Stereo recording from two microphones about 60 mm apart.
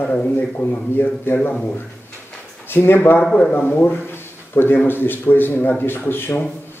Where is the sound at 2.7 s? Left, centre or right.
Left.